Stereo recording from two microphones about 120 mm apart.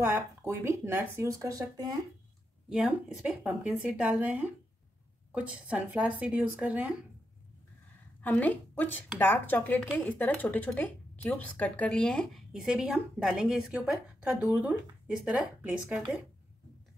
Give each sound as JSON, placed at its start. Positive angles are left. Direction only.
{"t": 0.0, "sound": "speech", "side_deg": -20}
{"t": 2.7, "sound": "a woman's voice", "side_deg": -5}
{"t": 8.2, "sound": "a woman's voice", "side_deg": 15}
{"t": 12.6, "sound": "a woman's voice", "side_deg": -10}